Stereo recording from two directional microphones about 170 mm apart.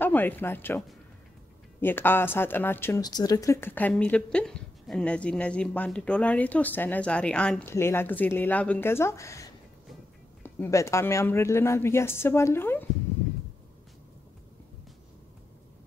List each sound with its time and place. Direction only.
0.0 s a woman's voice: 10° left (ahead or behind)